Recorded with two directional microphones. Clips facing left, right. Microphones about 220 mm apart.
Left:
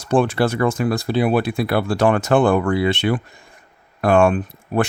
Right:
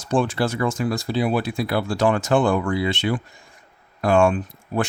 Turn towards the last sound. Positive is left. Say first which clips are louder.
# left 4 dB
turn(degrees=60)  # may be behind; listen again after turning